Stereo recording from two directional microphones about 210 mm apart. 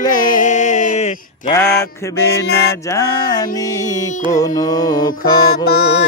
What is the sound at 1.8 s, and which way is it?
Music, 15° left (ahead or behind).